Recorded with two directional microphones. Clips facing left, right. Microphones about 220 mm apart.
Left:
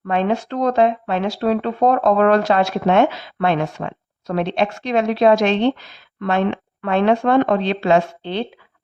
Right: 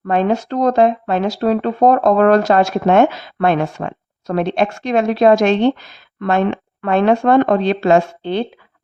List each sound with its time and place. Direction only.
0.1 s speech: 45° right (ahead or behind)